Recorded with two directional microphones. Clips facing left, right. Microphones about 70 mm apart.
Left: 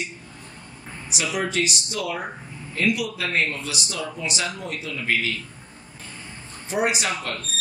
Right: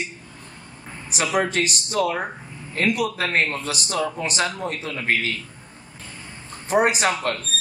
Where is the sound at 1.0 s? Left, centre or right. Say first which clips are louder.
Right 4 dB; right.